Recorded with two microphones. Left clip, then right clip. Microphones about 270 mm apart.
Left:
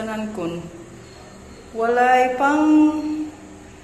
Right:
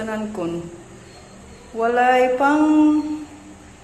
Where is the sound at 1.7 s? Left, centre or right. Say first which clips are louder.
Even; centre.